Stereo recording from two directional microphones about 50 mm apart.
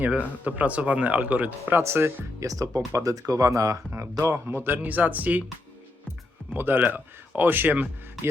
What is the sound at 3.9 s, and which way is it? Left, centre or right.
Speech, right.